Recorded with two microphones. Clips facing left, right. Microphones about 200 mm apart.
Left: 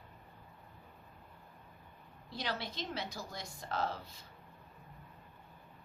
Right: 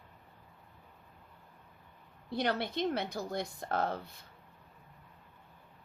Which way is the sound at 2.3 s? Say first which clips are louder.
Right 8 dB; 55° right (ahead or behind).